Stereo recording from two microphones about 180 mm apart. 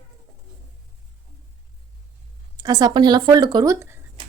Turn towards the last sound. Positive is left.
turn(degrees=-15)  # may be behind; listen again after turning